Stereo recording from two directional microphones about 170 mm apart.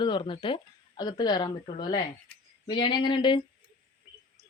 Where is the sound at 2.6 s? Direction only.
25° left (ahead or behind).